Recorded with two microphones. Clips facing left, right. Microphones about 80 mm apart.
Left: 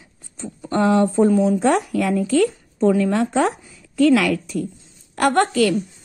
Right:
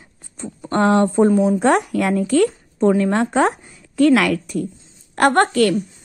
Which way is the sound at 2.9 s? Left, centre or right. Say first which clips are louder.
Right 1 dB; right.